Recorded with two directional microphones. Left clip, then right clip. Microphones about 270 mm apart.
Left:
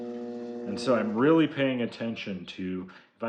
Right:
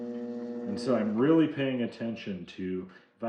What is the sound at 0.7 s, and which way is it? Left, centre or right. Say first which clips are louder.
Speech: left 3 dB; centre.